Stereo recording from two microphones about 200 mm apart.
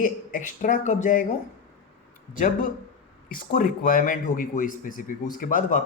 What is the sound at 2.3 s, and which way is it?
A man's voice, 40° left (ahead or behind).